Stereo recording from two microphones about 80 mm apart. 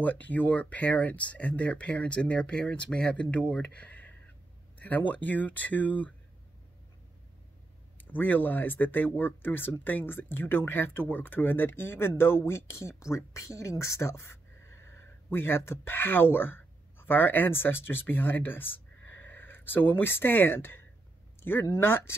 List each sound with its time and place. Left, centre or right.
0.0 s speech: left
8.0 s speech: left
21.4 s a sound: left
21.6 s speech: left